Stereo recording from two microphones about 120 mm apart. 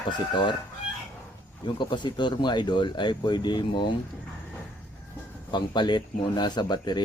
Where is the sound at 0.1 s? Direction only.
40° left (ahead or behind).